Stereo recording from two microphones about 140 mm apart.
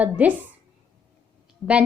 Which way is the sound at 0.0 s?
10° right (ahead or behind).